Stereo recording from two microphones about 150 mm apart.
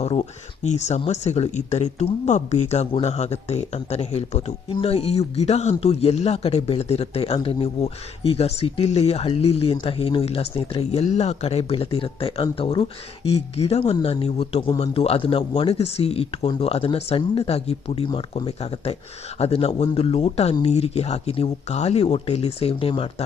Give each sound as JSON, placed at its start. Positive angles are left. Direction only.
{"t": 0.0, "sound": "speech", "side_deg": 45}